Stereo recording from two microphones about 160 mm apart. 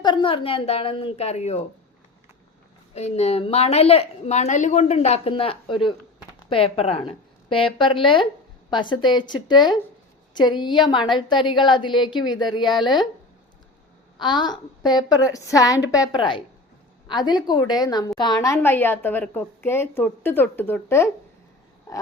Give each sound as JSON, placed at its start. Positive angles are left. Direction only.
{"t": 0.0, "sound": "a woman's voice", "side_deg": 30}
{"t": 2.9, "sound": "a woman's voice", "side_deg": 40}
{"t": 14.2, "sound": "a woman's voice", "side_deg": 30}